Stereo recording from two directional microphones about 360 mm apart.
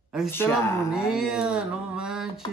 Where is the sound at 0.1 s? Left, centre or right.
Centre.